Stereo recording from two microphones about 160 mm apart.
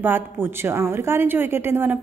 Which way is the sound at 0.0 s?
15° right (ahead or behind).